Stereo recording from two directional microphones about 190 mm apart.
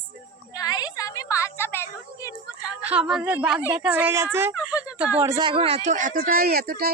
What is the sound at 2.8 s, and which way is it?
A woman's voice, 5° right (ahead or behind).